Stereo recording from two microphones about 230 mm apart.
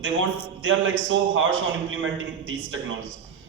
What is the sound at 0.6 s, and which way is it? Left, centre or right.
A man's voice, right.